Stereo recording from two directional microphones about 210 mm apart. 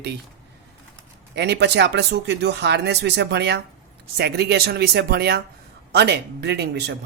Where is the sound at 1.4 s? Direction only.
55° right (ahead or behind).